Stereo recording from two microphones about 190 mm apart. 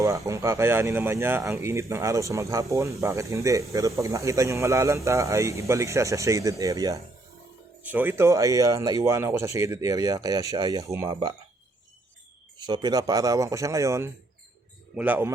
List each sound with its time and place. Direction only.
0.3 s speech: 15° right (ahead or behind)
12.5 s speech: 20° right (ahead or behind)